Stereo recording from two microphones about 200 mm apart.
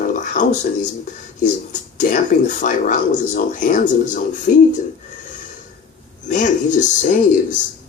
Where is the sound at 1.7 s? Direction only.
40° left (ahead or behind).